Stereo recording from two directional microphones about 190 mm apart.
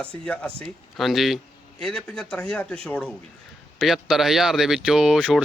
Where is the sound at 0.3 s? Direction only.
5° left (ahead or behind).